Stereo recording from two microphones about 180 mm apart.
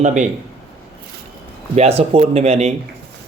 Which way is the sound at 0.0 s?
40° right (ahead or behind).